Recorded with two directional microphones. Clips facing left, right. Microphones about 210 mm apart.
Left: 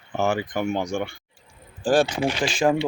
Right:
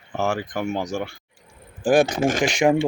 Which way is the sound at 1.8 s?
20° right (ahead or behind).